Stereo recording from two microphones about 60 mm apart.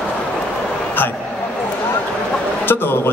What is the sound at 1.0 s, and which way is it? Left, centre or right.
Speech, left.